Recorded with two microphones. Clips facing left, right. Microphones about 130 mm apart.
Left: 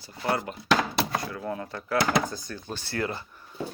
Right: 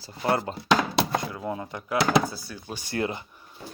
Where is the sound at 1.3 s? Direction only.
15° right (ahead or behind).